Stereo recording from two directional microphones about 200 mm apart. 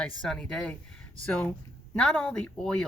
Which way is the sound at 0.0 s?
5° left (ahead or behind).